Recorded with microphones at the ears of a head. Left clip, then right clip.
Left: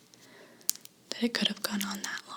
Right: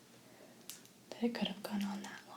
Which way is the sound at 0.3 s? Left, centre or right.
Left.